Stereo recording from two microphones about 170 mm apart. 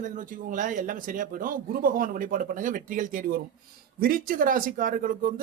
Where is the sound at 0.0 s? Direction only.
50° right (ahead or behind).